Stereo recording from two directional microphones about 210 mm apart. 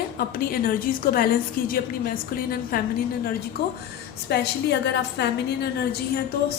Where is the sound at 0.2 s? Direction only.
45° left (ahead or behind).